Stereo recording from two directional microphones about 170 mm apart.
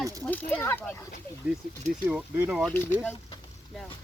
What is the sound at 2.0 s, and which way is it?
Speech, 5° right (ahead or behind).